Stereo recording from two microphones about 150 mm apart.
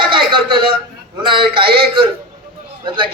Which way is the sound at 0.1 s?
35° right (ahead or behind).